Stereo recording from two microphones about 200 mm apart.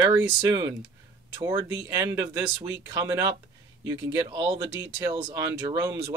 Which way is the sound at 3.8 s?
25° right (ahead or behind).